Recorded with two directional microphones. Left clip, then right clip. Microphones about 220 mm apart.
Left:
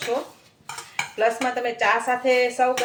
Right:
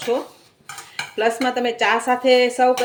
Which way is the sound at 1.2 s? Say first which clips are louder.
Right 3 dB; 40° right (ahead or behind).